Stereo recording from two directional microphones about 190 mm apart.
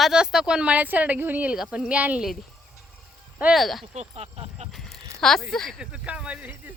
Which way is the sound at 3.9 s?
30° right (ahead or behind).